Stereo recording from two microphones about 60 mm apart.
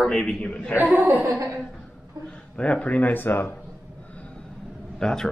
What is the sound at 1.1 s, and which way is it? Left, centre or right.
Speech, right.